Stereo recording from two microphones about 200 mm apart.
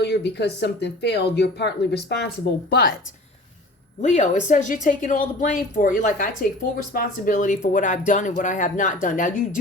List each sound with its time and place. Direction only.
0.0 s speech: 55° left (ahead or behind)
4.0 s speech: 35° left (ahead or behind)